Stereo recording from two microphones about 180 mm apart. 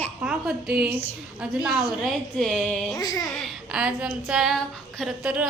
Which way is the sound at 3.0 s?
20° left (ahead or behind).